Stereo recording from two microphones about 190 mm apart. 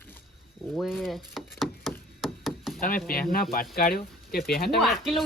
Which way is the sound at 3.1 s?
50° left (ahead or behind).